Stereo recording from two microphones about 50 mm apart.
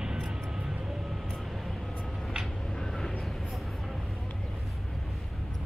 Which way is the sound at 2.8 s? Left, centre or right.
Centre.